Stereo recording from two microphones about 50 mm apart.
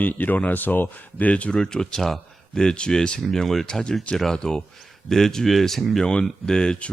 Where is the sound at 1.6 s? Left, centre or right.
Centre.